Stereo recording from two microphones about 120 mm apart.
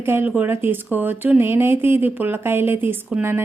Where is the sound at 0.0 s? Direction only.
20° right (ahead or behind).